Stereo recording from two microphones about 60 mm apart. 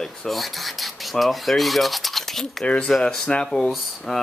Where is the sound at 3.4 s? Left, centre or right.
Centre.